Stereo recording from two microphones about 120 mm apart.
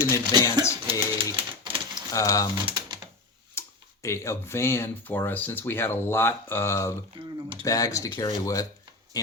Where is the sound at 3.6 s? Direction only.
20° left (ahead or behind).